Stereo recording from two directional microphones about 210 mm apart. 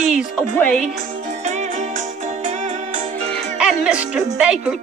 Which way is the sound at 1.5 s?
35° right (ahead or behind).